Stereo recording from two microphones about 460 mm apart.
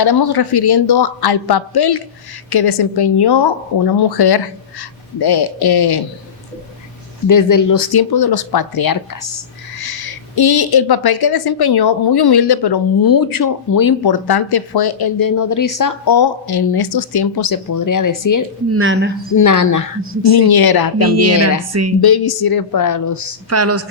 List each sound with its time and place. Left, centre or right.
0.0 s a woman's voice: left
7.3 s a woman's voice: left
18.7 s speech: right
19.3 s speech: left
20.2 s a woman's voice: left
21.0 s speech: right
22.0 s a woman's voice: left
23.5 s speech: right